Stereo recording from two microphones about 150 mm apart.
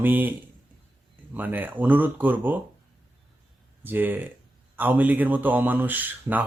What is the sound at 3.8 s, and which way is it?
Speech, 10° right (ahead or behind).